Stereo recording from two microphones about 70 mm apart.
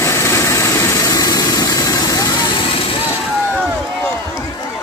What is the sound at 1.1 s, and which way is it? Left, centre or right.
Vehicle, left.